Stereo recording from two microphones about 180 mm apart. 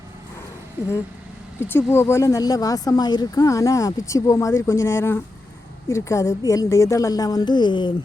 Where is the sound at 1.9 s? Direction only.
15° left (ahead or behind).